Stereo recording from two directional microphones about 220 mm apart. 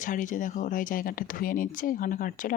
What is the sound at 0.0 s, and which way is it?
Speech, 35° left (ahead or behind).